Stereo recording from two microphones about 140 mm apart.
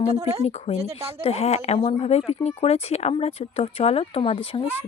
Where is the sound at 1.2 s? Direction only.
45° left (ahead or behind).